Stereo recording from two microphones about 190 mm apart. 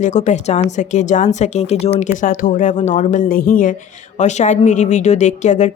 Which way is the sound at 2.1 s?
45° left (ahead or behind).